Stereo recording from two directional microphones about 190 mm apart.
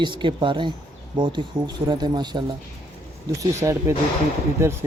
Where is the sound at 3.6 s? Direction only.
15° right (ahead or behind).